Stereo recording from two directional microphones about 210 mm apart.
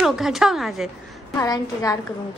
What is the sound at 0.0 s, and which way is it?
Speech, centre (ahead or behind).